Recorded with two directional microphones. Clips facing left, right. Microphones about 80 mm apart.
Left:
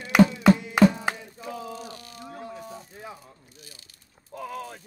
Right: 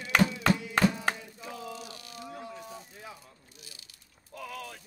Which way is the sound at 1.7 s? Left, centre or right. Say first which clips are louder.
Left 4 dB; left.